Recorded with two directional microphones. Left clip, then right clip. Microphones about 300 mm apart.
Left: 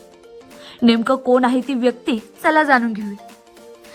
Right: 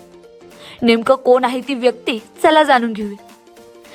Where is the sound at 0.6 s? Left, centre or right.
Centre.